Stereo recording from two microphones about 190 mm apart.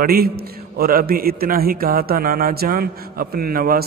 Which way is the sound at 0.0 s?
55° right (ahead or behind).